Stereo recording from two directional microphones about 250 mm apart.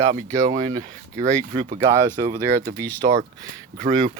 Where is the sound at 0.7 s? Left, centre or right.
Right.